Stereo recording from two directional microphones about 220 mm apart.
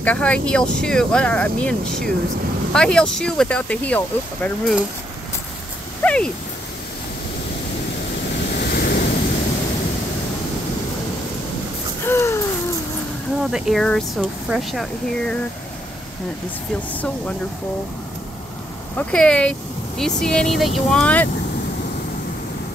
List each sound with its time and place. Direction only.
0.0 s speech: 5° left (ahead or behind)
6.0 s a sound: 5° left (ahead or behind)
8.5 s waves: 45° left (ahead or behind)
12.0 s a sound: 10° left (ahead or behind)
13.4 s speech: centre (ahead or behind)
18.9 s speech: 5° left (ahead or behind)